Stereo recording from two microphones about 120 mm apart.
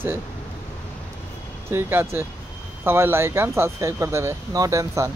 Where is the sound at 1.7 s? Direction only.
20° right (ahead or behind).